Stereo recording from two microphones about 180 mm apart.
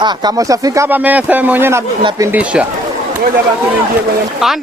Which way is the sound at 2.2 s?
10° right (ahead or behind).